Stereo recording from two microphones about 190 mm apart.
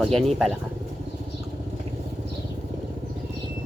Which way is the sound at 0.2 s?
Centre (ahead or behind).